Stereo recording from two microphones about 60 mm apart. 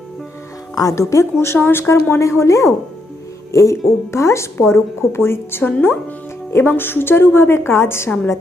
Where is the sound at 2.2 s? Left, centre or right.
Left.